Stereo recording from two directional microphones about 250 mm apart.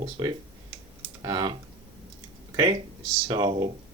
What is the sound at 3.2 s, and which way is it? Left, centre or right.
Speech, centre.